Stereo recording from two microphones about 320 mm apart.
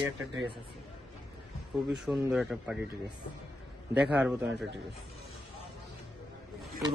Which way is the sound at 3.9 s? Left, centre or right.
Centre.